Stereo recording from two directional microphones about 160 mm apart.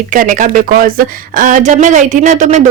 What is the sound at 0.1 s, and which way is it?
Speech, 50° right (ahead or behind).